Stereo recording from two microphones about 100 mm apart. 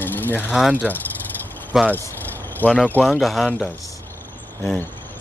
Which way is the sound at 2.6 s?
15° left (ahead or behind).